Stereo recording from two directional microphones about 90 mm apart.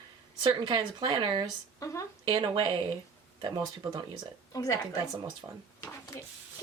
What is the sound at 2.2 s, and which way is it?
Speech, 60° right (ahead or behind).